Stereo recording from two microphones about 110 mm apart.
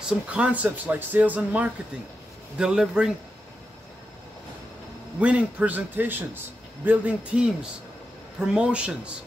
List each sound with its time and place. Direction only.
0.0 s a man's voice: 10° right (ahead or behind)
5.2 s a man's voice: 15° right (ahead or behind)
8.5 s a man's voice: 10° right (ahead or behind)